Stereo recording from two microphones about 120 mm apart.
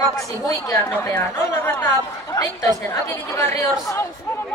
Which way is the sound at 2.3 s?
30° left (ahead or behind).